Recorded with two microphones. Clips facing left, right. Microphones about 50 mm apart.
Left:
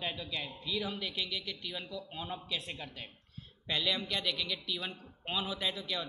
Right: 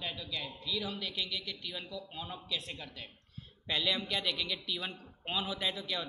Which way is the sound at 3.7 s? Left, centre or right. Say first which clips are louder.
Even; centre.